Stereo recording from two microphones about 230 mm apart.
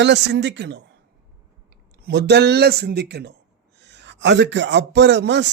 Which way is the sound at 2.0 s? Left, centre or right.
Right.